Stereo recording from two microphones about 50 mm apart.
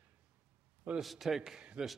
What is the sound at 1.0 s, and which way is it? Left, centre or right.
Speech, centre.